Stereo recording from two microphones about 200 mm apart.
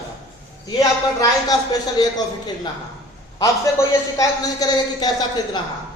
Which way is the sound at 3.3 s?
15° left (ahead or behind).